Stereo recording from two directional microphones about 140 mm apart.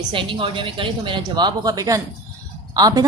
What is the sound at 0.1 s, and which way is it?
A woman's voice, 35° right (ahead or behind).